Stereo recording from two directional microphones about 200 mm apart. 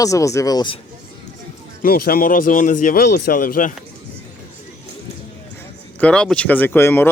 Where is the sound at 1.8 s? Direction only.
50° left (ahead or behind).